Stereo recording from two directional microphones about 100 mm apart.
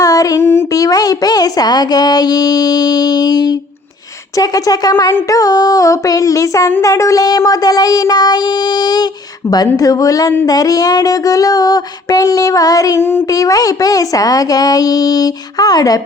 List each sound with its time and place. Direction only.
0.0 s speech: 35° left (ahead or behind)
13.0 s speech: 25° left (ahead or behind)